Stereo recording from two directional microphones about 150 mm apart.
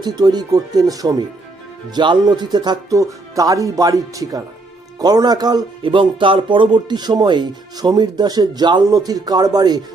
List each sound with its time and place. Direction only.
0.0 s speech: 30° right (ahead or behind)